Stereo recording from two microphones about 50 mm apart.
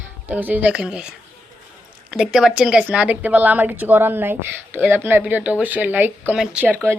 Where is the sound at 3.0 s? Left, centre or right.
Right.